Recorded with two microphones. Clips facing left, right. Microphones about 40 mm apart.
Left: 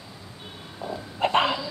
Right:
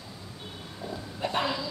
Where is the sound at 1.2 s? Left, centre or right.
Left.